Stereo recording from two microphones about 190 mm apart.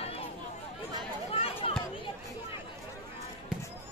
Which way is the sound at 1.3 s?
30° left (ahead or behind).